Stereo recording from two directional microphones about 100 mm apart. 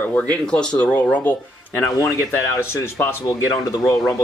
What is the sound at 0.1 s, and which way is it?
Speech, 10° left (ahead or behind).